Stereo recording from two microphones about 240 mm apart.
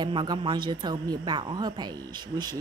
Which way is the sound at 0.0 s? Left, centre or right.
Centre.